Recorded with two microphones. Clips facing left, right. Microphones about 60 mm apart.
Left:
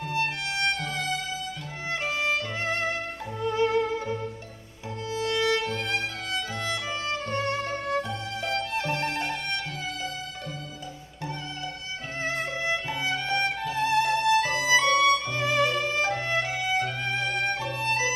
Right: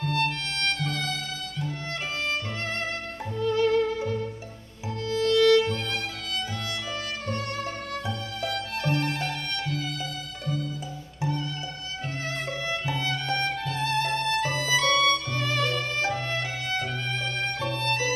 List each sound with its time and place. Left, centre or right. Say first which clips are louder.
0.0 s music: right 1 dB; centre
5.0 s music: right 6 dB; left
12.3 s music: left 4 dB; centre